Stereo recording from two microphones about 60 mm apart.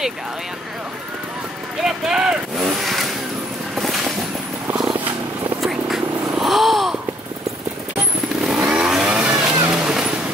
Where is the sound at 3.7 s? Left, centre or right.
Centre.